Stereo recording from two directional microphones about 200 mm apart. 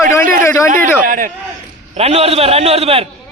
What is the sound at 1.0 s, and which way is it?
Speech, 40° right (ahead or behind).